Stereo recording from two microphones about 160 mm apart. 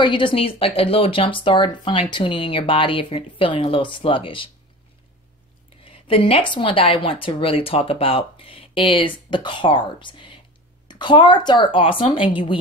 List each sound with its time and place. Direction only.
0.0 s a woman's voice: 30° left (ahead or behind)
5.9 s a woman's voice: 35° left (ahead or behind)